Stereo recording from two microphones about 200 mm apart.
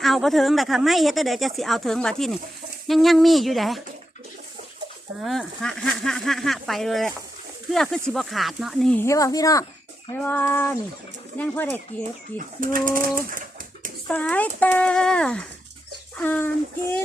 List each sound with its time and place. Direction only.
0.0 s speech: centre (ahead or behind)
5.2 s speech: centre (ahead or behind); by 9.6 s 15° left (ahead or behind)
10.2 s a sound: 10° left (ahead or behind)
12.5 s speech: 45° right (ahead or behind)
14.1 s speech: 5° left (ahead or behind)
16.1 s a sound: 10° left (ahead or behind)